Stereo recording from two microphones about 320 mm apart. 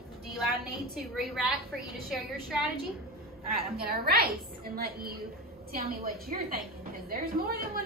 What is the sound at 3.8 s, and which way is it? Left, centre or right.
A woman's voice, right.